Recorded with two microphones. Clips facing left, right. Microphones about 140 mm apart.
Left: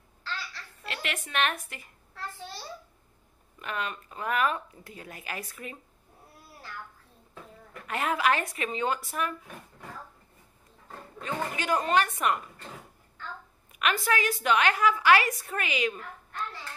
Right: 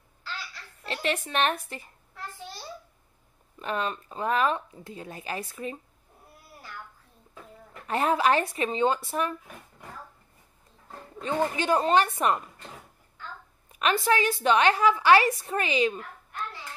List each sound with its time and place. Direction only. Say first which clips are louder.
0.8 s speech: right 7 dB; 30° right (ahead or behind)
3.5 s a woman's voice: right 4 dB; 30° right (ahead or behind)
7.8 s a woman's voice: right 4 dB; 30° right (ahead or behind)
11.1 s a woman's voice: right 6 dB; 30° right (ahead or behind)
13.7 s a woman's voice: right 4 dB; 30° right (ahead or behind)